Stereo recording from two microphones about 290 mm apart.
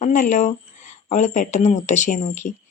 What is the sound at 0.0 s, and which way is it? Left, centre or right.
Speech, left.